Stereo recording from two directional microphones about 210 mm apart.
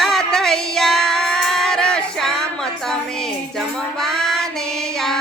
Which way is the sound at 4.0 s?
Centre (ahead or behind).